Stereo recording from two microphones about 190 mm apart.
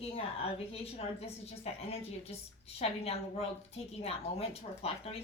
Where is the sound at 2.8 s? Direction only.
30° left (ahead or behind).